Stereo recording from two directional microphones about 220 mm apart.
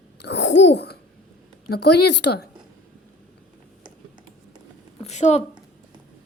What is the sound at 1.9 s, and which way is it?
Speech, 90° left.